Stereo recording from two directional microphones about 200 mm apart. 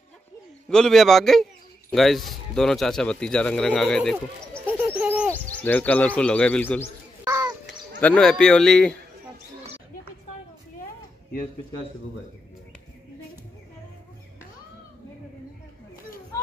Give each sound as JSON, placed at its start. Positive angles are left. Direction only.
{"t": 0.7, "sound": "speech", "side_deg": 5}
{"t": 4.6, "sound": "bird", "side_deg": -10}
{"t": 5.3, "sound": "speech", "side_deg": 10}
{"t": 7.2, "sound": "crow", "side_deg": -20}
{"t": 8.0, "sound": "speech", "side_deg": 5}